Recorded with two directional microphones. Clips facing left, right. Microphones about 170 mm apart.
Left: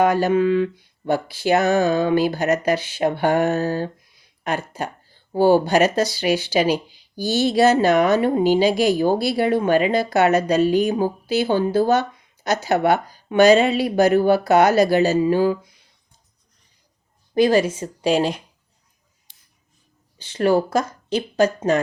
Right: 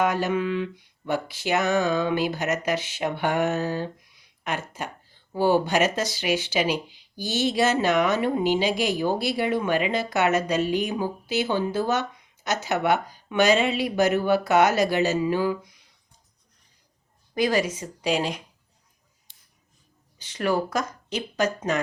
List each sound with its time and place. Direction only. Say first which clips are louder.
0.0 s speech: left 7 dB; 35° left (ahead or behind)
17.3 s a woman's voice: left 7 dB; 30° left (ahead or behind)
20.1 s speech: left 7 dB; 30° left (ahead or behind)